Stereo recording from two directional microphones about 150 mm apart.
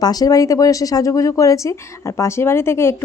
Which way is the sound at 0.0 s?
25° left (ahead or behind).